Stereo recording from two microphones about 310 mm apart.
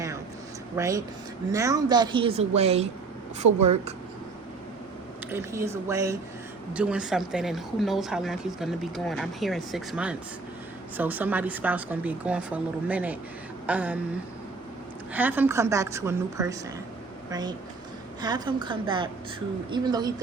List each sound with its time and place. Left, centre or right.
0.8 s a woman's voice: centre
5.3 s a woman's voice: centre
15.1 s a woman's voice: centre
18.2 s a woman's voice: centre